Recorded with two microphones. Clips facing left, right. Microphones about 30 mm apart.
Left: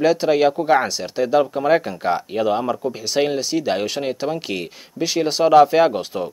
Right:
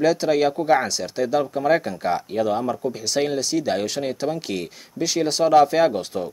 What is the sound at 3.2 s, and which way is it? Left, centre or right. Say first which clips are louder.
Speech: left 3 dB; centre.